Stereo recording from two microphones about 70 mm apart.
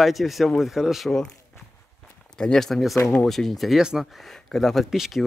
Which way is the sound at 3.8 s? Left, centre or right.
Centre.